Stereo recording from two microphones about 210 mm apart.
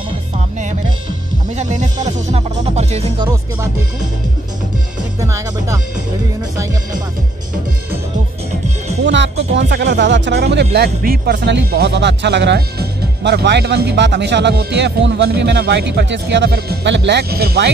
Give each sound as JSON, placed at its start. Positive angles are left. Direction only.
{"t": 1.5, "sound": "speech", "side_deg": -35}
{"t": 5.2, "sound": "speech", "side_deg": -15}
{"t": 9.0, "sound": "speech", "side_deg": -60}